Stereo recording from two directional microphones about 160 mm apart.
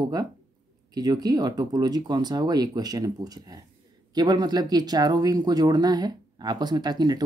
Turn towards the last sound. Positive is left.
turn(degrees=-25)  # may be behind; listen again after turning